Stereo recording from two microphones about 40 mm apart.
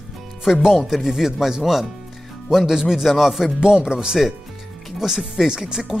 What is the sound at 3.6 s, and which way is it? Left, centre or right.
Speech, right.